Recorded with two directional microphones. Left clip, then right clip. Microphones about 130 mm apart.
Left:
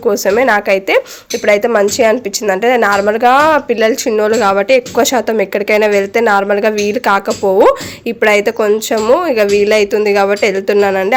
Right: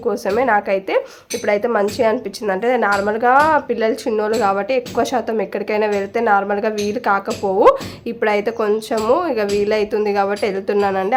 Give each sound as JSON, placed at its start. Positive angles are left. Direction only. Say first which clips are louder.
{"t": 0.0, "sound": "a woman's voice", "louder": "left 7 dB", "side_deg": 30}